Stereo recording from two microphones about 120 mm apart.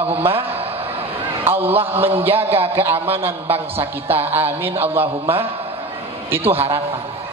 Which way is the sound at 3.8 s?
55° right (ahead or behind).